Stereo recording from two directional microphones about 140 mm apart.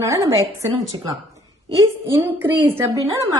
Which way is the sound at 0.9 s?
35° right (ahead or behind).